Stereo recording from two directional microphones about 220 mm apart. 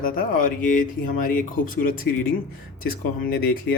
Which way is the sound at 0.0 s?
40° left (ahead or behind).